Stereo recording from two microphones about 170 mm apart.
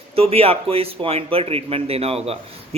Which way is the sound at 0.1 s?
35° right (ahead or behind).